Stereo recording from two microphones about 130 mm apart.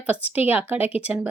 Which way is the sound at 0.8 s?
50° left (ahead or behind).